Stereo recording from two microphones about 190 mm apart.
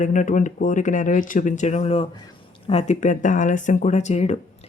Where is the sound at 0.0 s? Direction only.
40° left (ahead or behind).